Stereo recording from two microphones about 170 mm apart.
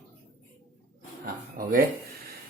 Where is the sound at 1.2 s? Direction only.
55° right (ahead or behind).